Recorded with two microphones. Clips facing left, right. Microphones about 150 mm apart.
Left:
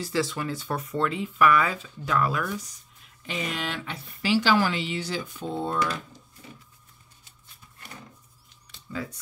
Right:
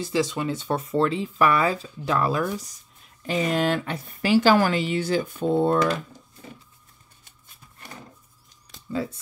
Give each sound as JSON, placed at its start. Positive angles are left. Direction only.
{"t": 0.0, "sound": "speech", "side_deg": -20}
{"t": 3.3, "sound": "a woman's voice", "side_deg": -40}
{"t": 8.9, "sound": "speech", "side_deg": -30}